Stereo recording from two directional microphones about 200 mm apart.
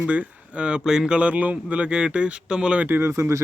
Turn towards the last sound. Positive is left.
turn(degrees=-15)  # may be behind; listen again after turning